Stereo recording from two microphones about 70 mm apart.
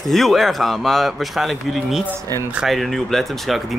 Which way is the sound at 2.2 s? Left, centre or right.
Right.